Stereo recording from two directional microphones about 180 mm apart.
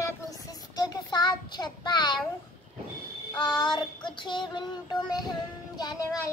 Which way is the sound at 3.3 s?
25° left (ahead or behind).